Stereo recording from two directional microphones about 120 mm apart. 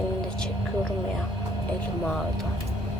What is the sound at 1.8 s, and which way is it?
Speech, 10° left (ahead or behind).